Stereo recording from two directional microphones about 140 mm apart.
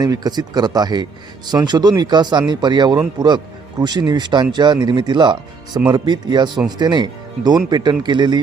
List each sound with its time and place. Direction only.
0.0 s speech: 30° right (ahead or behind)